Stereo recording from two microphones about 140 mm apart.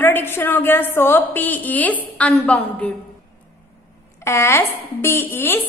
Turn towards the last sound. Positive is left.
turn(degrees=15)  # may be behind; listen again after turning